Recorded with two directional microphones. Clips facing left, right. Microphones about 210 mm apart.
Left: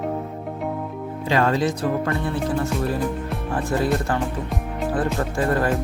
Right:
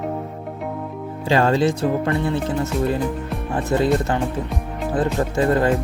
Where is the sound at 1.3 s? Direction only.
30° right (ahead or behind).